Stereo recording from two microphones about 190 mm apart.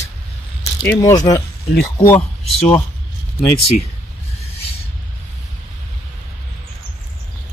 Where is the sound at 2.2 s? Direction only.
30° left (ahead or behind).